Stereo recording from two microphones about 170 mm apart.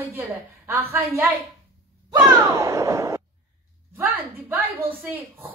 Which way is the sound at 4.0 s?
10° right (ahead or behind).